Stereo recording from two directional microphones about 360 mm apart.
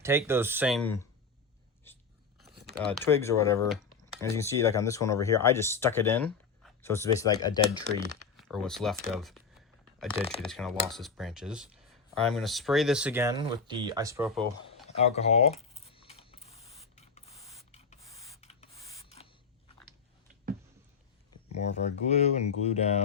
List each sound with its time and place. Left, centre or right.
0.0 s speech: centre
2.6 s a sound: right
2.8 s speech: centre
7.9 s speech: right
8.4 s speech: centre
9.2 s shuffling cards: centre
10.4 s speech: centre
14.8 s a sound: centre
17.7 s spray: centre
21.7 s speech: centre